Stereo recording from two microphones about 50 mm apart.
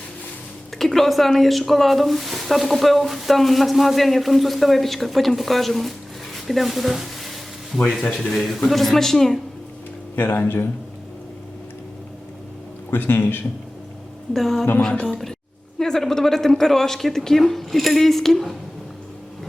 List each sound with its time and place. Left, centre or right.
0.8 s speech: centre
6.3 s a sound: centre
8.2 s a woman's voice: centre
10.2 s speech: left
12.9 s speech: left
14.3 s a woman's voice: centre
15.0 s a woman's voice: centre